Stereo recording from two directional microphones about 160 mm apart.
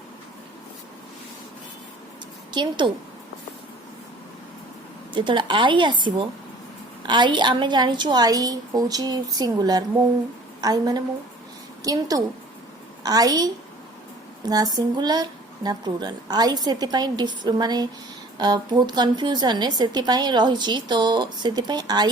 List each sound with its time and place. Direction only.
2.5 s a woman's voice: 30° right (ahead or behind)
5.1 s a woman's voice: 30° right (ahead or behind)